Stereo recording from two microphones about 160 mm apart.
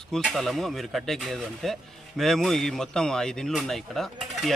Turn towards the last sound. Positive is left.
turn(degrees=0)  # may be behind; listen again after turning